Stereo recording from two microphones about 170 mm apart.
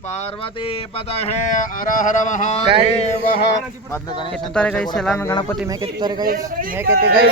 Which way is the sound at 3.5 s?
25° left (ahead or behind).